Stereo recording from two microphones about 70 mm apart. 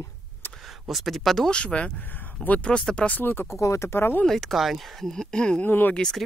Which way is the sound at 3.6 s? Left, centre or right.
Left.